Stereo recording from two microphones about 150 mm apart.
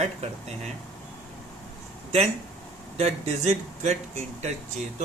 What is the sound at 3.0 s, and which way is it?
A man's voice, 45° right (ahead or behind).